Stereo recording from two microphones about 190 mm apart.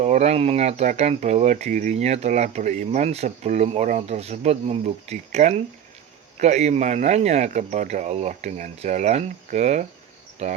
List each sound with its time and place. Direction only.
0.0 s speech: 35° right (ahead or behind)